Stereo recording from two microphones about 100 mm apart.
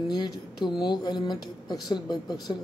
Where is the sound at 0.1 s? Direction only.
40° left (ahead or behind).